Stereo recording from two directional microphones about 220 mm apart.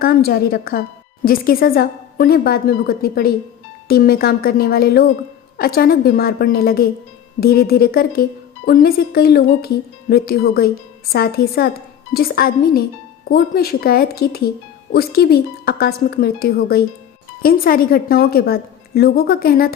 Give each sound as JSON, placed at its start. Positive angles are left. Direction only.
{"t": 0.0, "sound": "speech", "side_deg": 45}